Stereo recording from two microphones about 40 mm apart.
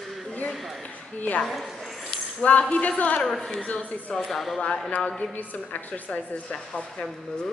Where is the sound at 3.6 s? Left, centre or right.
Left.